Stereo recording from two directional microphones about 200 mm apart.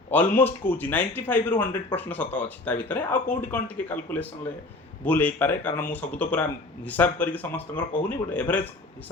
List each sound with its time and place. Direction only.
0.1 s speech: 10° left (ahead or behind)